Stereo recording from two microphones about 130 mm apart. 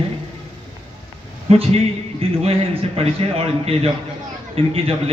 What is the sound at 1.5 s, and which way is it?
A man's voice, 50° right (ahead or behind).